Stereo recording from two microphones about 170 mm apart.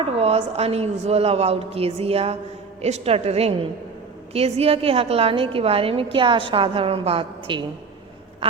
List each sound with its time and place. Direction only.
0.0 s a woman's voice: 35° right (ahead or behind)